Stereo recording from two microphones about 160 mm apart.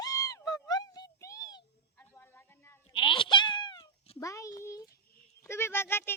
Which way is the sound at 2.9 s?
30° left (ahead or behind).